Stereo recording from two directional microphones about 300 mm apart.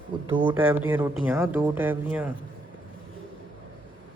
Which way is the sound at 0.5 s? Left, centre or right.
Centre.